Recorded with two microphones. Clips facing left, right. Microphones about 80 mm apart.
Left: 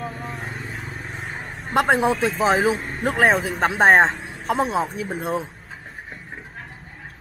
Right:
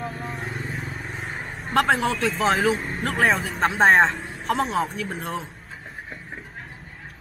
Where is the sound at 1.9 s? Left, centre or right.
Left.